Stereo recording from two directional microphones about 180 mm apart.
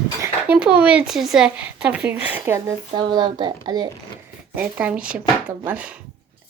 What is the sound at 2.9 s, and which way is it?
Speech, 25° right (ahead or behind).